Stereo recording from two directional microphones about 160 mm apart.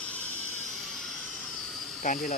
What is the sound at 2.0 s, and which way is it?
Speech, 50° left (ahead or behind).